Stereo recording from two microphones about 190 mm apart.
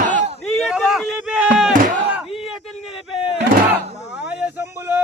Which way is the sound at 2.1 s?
Centre (ahead or behind).